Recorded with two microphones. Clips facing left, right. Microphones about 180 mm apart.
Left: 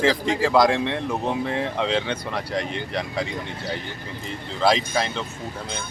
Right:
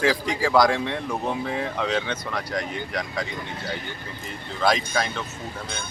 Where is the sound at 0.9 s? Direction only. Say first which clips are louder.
Left 2 dB; centre (ahead or behind).